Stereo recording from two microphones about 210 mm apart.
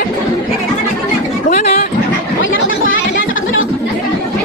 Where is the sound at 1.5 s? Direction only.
35° left (ahead or behind).